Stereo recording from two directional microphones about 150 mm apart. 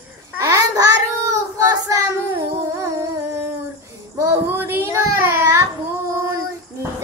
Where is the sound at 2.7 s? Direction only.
20° right (ahead or behind).